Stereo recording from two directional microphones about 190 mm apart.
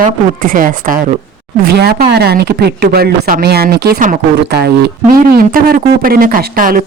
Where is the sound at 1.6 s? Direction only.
55° right (ahead or behind).